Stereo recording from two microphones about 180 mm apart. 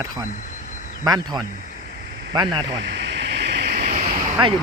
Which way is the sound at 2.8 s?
75° right (ahead or behind).